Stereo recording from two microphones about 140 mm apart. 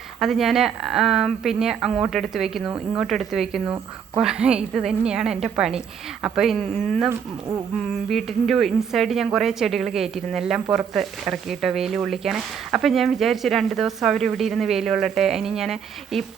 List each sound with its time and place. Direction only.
0.2 s a woman's voice: centre (ahead or behind)
7.1 s speech: 20° right (ahead or behind)
8.1 s a woman's voice: centre (ahead or behind)